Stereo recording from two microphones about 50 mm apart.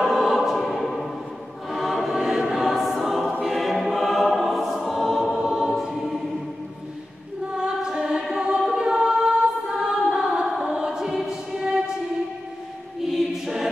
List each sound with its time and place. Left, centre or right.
0.0 s choir: centre
5.4 s choir: centre
7.5 s choir: centre
10.2 s music: centre
10.7 s choir: centre
13.0 s choir: centre